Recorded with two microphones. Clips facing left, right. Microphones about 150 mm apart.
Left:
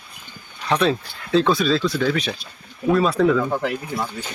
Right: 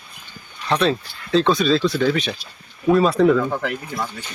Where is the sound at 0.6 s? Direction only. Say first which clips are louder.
Even; 10° left (ahead or behind).